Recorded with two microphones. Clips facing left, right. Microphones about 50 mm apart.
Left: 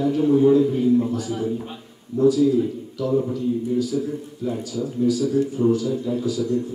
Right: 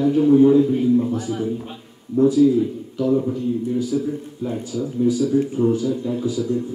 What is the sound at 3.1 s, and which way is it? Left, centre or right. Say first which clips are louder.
Speech: right 2 dB; centre.